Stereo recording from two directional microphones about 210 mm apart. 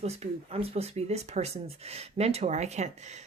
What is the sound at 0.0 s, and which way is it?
Speech, 30° right (ahead or behind).